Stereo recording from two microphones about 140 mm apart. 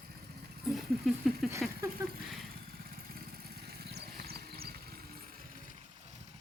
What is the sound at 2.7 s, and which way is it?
Vehicle, 90° right.